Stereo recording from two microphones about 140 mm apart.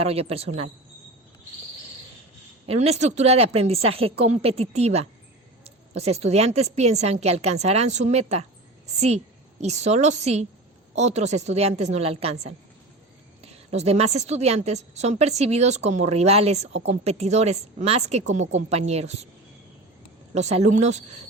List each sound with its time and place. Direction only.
0.0 s a woman's voice: 45° right (ahead or behind)
2.6 s a woman's voice: 50° right (ahead or behind)
20.3 s a woman's voice: 50° right (ahead or behind)